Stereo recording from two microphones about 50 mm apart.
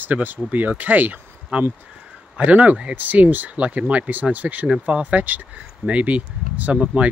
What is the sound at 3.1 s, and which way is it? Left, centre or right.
Speech, right.